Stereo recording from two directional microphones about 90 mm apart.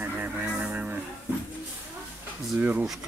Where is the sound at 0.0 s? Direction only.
15° right (ahead or behind).